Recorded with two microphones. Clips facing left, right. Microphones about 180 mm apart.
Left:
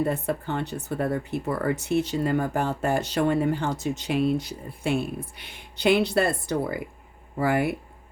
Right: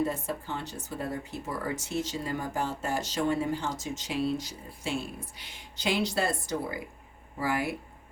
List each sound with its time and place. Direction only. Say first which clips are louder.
0.0 s speech: left 5 dB; 60° left (ahead or behind)